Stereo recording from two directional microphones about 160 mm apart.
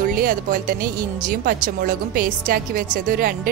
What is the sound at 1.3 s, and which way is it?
Speech, 90° right.